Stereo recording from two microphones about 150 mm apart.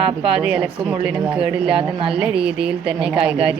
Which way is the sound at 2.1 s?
5° right (ahead or behind).